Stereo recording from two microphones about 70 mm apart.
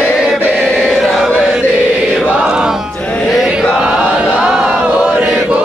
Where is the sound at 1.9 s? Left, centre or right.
Centre.